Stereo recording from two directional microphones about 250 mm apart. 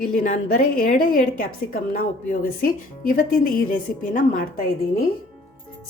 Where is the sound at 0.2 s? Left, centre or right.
Left.